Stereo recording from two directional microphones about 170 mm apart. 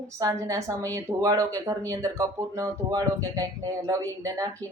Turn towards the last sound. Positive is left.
turn(degrees=-20)  # may be behind; listen again after turning